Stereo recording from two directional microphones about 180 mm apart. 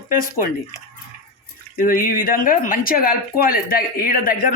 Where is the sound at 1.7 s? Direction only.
50° left (ahead or behind).